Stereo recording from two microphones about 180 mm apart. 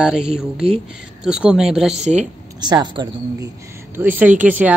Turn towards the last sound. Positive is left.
turn(degrees=-10)  # may be behind; listen again after turning